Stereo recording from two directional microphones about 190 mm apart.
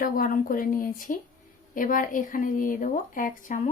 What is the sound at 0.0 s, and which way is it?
A woman's voice, 45° left (ahead or behind).